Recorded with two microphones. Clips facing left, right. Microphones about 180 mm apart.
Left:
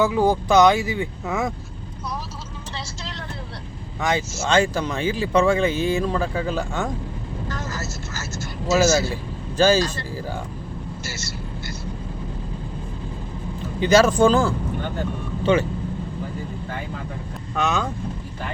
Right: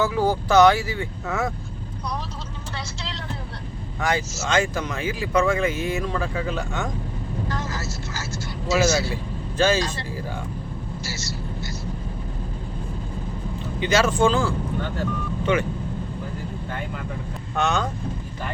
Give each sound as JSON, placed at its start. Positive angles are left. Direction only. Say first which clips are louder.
{"t": 0.0, "sound": "speech", "louder": "left 3 dB", "side_deg": 15}
{"t": 4.4, "sound": "speech", "louder": "left 4 dB", "side_deg": 30}
{"t": 7.7, "sound": "vehicle", "louder": "even", "side_deg": 45}
{"t": 8.7, "sound": "speech", "louder": "left 3 dB", "side_deg": 45}
{"t": 9.6, "sound": "speech", "louder": "left 3 dB", "side_deg": 35}
{"t": 13.8, "sound": "speech", "louder": "left 4 dB", "side_deg": 40}
{"t": 15.5, "sound": "speech", "louder": "left 3 dB", "side_deg": 30}
{"t": 17.5, "sound": "speech", "louder": "even", "side_deg": 0}